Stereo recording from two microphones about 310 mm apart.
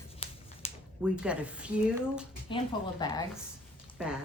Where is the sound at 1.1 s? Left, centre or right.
Centre.